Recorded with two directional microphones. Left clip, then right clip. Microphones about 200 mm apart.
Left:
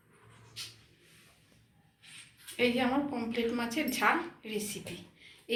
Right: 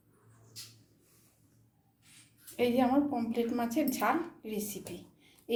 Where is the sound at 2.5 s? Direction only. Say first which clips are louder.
Right 1 dB; 60° right (ahead or behind).